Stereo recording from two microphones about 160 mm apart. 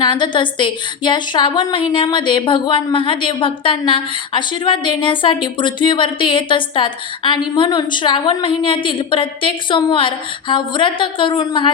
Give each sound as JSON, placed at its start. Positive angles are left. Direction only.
{"t": 0.0, "sound": "speech", "side_deg": 30}